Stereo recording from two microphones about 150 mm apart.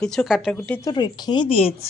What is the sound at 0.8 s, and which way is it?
Speech, 30° left (ahead or behind).